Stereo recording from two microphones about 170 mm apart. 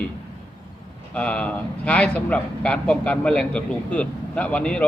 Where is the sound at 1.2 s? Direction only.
5° left (ahead or behind).